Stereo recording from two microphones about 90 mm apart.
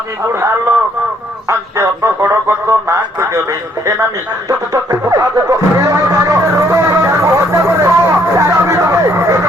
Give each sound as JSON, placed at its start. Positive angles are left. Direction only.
{"t": 1.5, "sound": "speech", "side_deg": -35}
{"t": 4.4, "sound": "music", "side_deg": -40}